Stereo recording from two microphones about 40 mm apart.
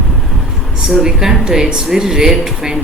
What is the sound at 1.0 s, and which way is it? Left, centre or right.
A woman's voice, centre.